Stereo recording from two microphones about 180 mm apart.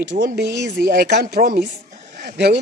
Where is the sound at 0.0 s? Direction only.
75° right (ahead or behind).